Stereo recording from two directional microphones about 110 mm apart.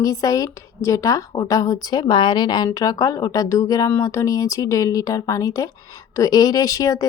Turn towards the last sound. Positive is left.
turn(degrees=30)  # may be behind; listen again after turning